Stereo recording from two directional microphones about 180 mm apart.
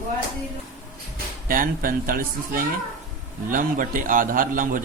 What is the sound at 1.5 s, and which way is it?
A man's voice, 50° right (ahead or behind).